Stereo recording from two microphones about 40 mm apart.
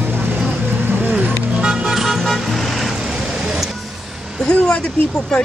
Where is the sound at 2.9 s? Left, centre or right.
Centre.